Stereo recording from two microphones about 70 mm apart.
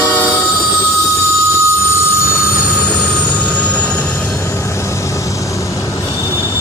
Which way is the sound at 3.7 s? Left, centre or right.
Left.